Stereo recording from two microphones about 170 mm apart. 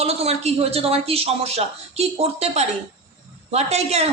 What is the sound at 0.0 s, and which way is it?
A woman's voice, 35° right (ahead or behind).